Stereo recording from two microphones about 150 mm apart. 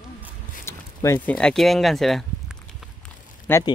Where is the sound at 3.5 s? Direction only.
15° left (ahead or behind).